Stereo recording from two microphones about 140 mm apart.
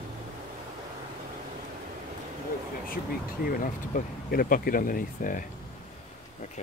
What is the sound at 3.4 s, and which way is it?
Speech, 90° left.